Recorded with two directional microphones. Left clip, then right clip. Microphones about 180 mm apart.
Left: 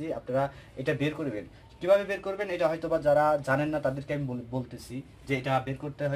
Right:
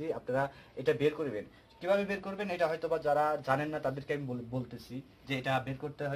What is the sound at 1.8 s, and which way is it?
Speech, 30° right (ahead or behind).